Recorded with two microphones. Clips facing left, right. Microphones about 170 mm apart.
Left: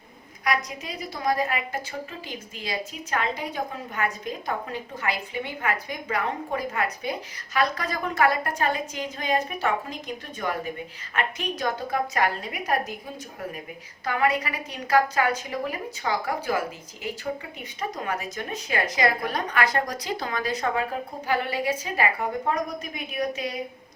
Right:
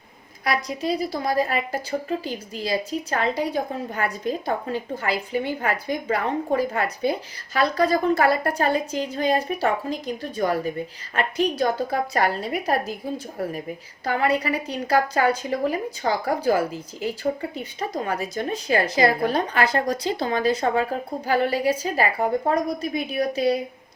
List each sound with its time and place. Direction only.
0.4 s a woman's voice: 30° right (ahead or behind)
14.0 s a woman's voice: 30° right (ahead or behind)
17.6 s a woman's voice: 30° right (ahead or behind)